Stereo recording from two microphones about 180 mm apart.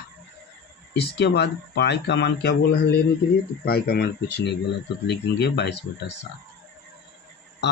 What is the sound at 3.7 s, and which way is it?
Speech, 60° left (ahead or behind).